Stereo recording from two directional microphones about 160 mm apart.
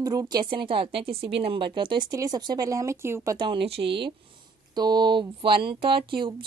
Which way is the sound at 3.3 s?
30° right (ahead or behind).